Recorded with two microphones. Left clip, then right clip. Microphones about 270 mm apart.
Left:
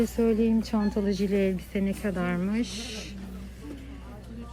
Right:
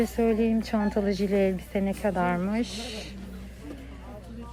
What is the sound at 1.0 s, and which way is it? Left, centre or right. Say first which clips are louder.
Speech: right 1 dB; centre.